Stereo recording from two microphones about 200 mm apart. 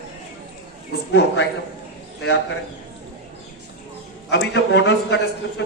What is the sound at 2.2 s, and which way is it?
Speech, 55° left (ahead or behind).